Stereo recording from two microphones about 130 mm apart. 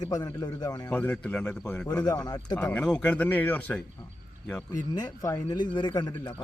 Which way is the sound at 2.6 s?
10° left (ahead or behind).